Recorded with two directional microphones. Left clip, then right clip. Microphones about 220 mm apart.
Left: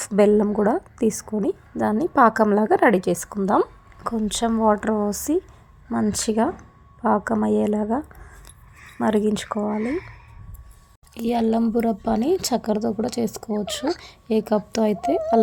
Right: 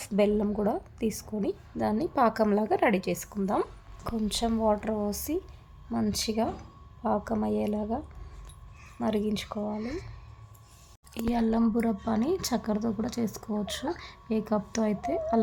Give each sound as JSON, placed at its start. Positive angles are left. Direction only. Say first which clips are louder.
{"t": 0.0, "sound": "a woman's voice", "louder": "left 9 dB", "side_deg": 20}
{"t": 11.3, "sound": "a woman's voice", "louder": "left 7 dB", "side_deg": 20}